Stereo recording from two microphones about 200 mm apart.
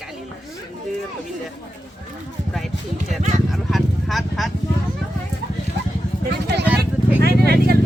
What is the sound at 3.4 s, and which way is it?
Speech, centre (ahead or behind).